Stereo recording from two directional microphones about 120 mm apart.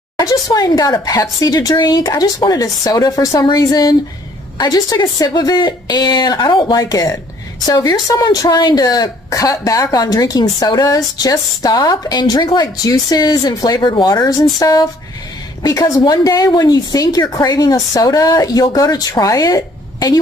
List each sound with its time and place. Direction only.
0.2 s a woman's voice: 30° left (ahead or behind)